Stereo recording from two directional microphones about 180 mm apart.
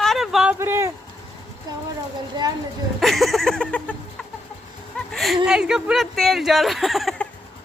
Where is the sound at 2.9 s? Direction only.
Centre (ahead or behind).